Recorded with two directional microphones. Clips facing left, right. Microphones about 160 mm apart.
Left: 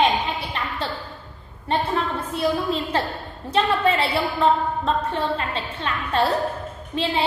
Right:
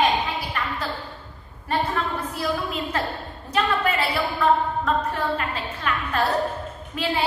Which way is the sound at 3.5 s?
30° left (ahead or behind).